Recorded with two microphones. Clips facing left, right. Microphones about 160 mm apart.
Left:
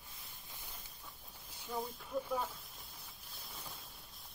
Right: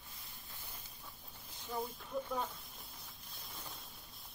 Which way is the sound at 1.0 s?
5° left (ahead or behind).